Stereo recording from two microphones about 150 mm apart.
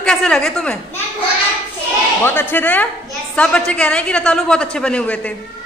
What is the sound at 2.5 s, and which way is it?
A woman's voice, 10° left (ahead or behind).